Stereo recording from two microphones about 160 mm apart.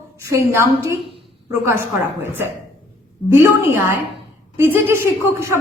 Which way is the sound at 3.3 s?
15° right (ahead or behind).